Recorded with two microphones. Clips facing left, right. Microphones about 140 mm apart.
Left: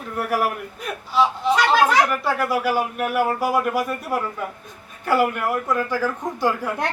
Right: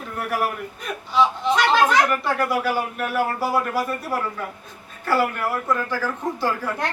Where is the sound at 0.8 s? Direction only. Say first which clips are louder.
Even; 10° left (ahead or behind).